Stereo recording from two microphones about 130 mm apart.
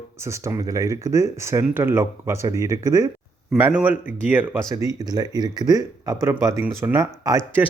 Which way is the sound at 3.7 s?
15° right (ahead or behind).